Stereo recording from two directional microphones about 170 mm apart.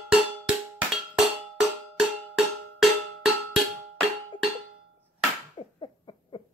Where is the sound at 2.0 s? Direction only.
Centre (ahead or behind).